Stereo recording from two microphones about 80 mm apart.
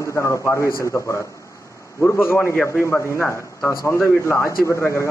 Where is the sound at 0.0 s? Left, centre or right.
Left.